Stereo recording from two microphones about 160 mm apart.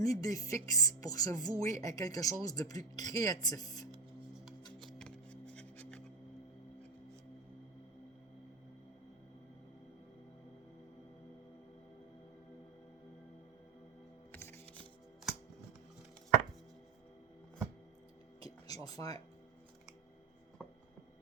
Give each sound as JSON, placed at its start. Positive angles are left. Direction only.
{"t": 0.0, "sound": "speech", "side_deg": 20}
{"t": 4.9, "sound": "music", "side_deg": 5}
{"t": 14.3, "sound": "music", "side_deg": 15}
{"t": 18.4, "sound": "a sound", "side_deg": 25}